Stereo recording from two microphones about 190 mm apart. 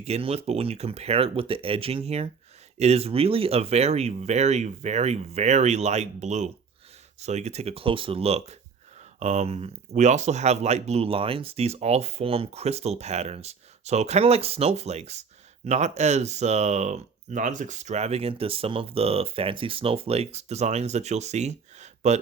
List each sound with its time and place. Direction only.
0.0 s speech: 30° right (ahead or behind)